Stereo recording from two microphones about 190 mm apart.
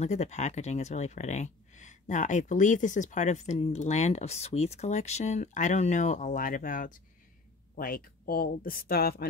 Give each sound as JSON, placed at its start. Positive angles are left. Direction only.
{"t": 0.0, "sound": "speech", "side_deg": 35}